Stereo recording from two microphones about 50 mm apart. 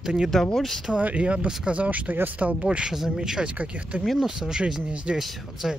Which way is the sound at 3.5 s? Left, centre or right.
Right.